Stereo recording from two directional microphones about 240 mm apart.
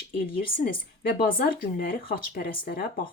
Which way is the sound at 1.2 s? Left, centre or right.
Left.